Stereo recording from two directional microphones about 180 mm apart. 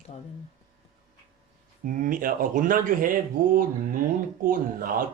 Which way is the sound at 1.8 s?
50° right (ahead or behind).